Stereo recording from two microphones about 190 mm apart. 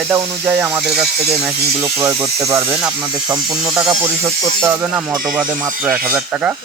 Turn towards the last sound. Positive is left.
turn(degrees=-10)  # may be behind; listen again after turning